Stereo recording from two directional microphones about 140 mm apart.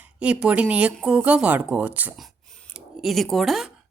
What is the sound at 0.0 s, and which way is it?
A woman's voice, 10° right (ahead or behind).